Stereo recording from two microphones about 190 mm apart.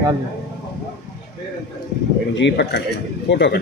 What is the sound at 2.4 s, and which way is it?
Speech, 65° left (ahead or behind).